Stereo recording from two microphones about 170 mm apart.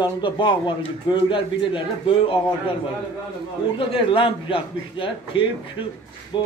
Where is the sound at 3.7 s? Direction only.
30° left (ahead or behind).